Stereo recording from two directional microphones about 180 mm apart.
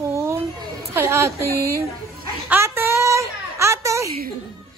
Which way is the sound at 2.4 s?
10° right (ahead or behind).